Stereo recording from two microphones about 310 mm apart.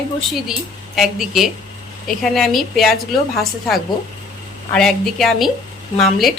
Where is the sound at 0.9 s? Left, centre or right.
Centre.